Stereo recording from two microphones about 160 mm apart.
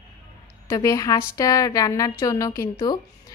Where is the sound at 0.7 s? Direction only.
20° left (ahead or behind).